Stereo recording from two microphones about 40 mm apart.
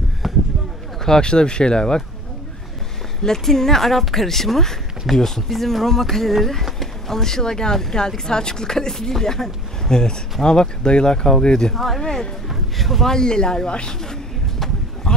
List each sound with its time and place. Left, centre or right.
0.2 s a sound: centre
1.0 s speech: centre
3.3 s speech: centre
11.7 s speech: centre
12.0 s speech: centre
12.4 s speech: centre
13.1 s a sound: centre